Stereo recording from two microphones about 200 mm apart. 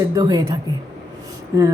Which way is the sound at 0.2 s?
20° right (ahead or behind).